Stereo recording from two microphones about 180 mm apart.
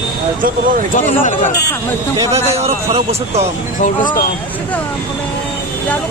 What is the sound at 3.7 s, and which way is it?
Speech, 45° left (ahead or behind).